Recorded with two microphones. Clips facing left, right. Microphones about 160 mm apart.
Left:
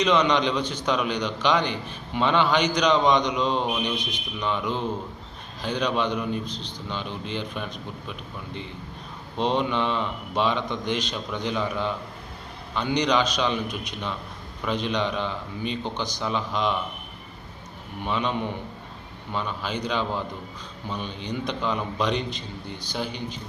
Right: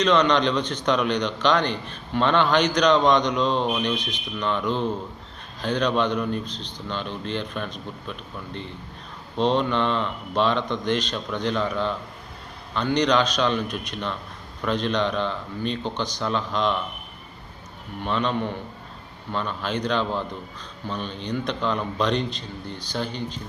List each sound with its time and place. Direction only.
0.0 s a man's voice: 10° left (ahead or behind)
6.5 s a man's voice: 15° right (ahead or behind)
6.9 s a man's voice: 10° left (ahead or behind)
9.4 s a man's voice: 10° left (ahead or behind)
18.0 s a man's voice: 15° left (ahead or behind)